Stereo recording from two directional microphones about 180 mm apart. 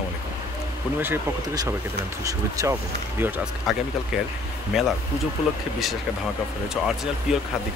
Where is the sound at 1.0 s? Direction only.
15° right (ahead or behind).